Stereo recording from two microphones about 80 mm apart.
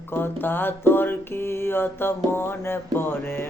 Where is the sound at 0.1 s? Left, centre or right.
Left.